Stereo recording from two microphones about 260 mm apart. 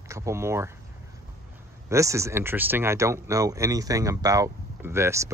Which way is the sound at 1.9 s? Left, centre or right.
Centre.